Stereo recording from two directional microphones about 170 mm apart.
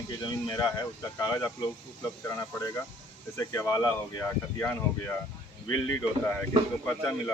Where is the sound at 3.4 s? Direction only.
15° left (ahead or behind).